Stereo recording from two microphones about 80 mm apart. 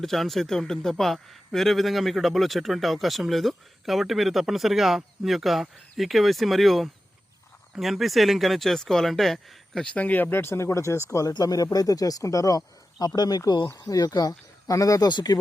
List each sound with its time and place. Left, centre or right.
0.0 s speech: centre
9.8 s speech: centre; by 15.0 s left
15.0 s speech: left